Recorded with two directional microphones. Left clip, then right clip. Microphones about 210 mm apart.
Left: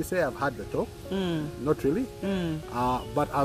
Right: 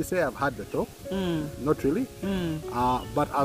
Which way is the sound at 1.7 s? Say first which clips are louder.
Right 1 dB; 5° left (ahead or behind).